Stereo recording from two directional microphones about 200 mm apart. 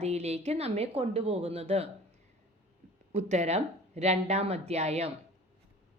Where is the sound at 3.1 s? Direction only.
35° right (ahead or behind).